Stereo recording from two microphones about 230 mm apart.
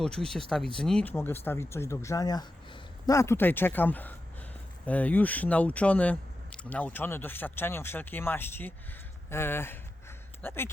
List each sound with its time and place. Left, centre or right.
0.0 s speech: centre